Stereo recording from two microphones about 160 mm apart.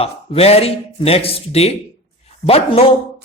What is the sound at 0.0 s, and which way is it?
Speech, 40° left (ahead or behind).